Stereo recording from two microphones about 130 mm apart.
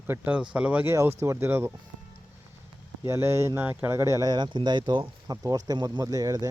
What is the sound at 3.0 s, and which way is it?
Speech, 20° right (ahead or behind).